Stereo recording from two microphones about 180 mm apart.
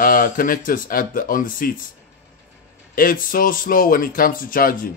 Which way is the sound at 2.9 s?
50° left (ahead or behind).